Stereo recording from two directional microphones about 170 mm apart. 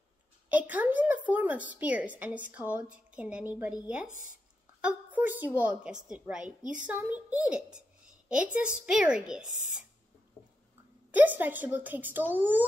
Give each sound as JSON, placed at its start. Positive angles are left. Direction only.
{"t": 0.5, "sound": "a woman's voice", "side_deg": -10}
{"t": 4.1, "sound": "speech", "side_deg": 50}
{"t": 4.8, "sound": "a woman's voice", "side_deg": -10}
{"t": 11.1, "sound": "a woman's voice", "side_deg": -10}